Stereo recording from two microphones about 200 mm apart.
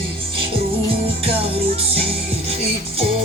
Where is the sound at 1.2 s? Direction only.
30° right (ahead or behind).